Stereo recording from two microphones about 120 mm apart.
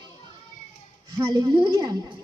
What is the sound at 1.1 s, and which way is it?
Speech, 30° right (ahead or behind).